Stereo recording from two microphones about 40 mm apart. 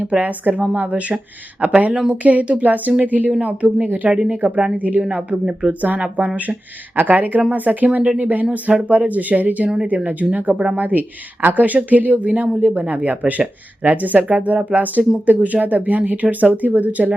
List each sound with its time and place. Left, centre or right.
0.0 s speech: right
4.5 s a woman's voice: right
6.9 s speech: right
10.5 s a woman's voice: right
10.8 s speech: right
12.4 s speech: right